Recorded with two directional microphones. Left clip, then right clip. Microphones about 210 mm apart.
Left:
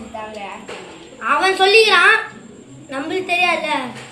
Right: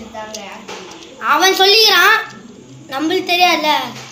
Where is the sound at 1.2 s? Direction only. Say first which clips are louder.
Right 3 dB; 55° right (ahead or behind).